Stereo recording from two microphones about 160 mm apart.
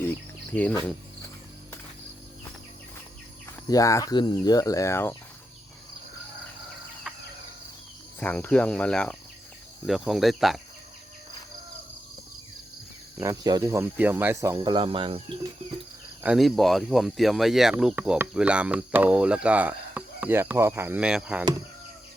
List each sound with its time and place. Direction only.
0.1 s speech: 10° left (ahead or behind)
3.7 s speech: 20° left (ahead or behind)
7.1 s cricket: centre (ahead or behind)
8.2 s cricket: 10° left (ahead or behind)
9.8 s speech: centre (ahead or behind)
13.1 s speech: 20° right (ahead or behind)
14.6 s cricket: 30° right (ahead or behind)
16.2 s speech: 5° right (ahead or behind)